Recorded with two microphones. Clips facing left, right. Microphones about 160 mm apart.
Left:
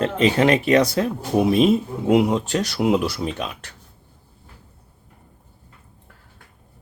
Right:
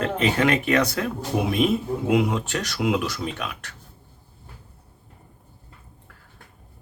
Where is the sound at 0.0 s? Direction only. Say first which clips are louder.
Left 4 dB; 30° left (ahead or behind).